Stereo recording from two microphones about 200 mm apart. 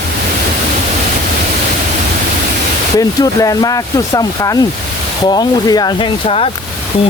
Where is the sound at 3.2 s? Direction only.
20° left (ahead or behind).